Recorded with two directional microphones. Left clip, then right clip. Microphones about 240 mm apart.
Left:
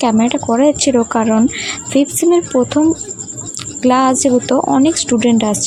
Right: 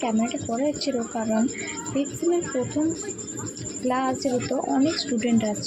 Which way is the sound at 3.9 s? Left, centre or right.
Left.